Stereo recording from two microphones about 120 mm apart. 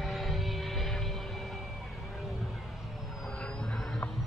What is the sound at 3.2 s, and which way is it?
Vehicle, 5° left (ahead or behind).